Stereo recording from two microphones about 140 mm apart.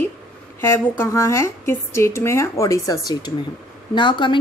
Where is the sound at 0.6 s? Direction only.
15° left (ahead or behind).